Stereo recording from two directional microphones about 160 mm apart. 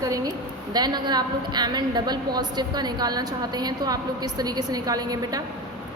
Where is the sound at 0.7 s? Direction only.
25° right (ahead or behind).